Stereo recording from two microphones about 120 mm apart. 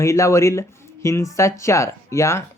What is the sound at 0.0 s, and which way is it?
Speech, 25° left (ahead or behind).